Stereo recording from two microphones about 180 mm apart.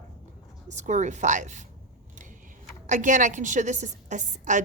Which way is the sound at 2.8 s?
45° right (ahead or behind).